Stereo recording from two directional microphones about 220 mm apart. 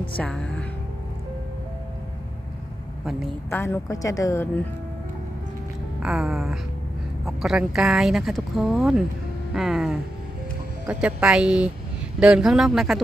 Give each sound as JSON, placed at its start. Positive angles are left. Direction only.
{"t": 0.2, "sound": "a woman's voice", "side_deg": 5}
{"t": 3.4, "sound": "speech", "side_deg": 10}
{"t": 6.0, "sound": "speech", "side_deg": 0}
{"t": 9.5, "sound": "music", "side_deg": 0}
{"t": 10.9, "sound": "speech", "side_deg": -5}